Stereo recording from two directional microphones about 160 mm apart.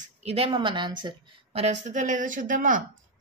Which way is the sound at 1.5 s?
45° right (ahead or behind).